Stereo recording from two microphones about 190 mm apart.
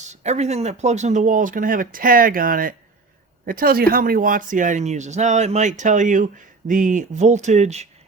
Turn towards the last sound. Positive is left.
turn(degrees=-35)  # may be behind; listen again after turning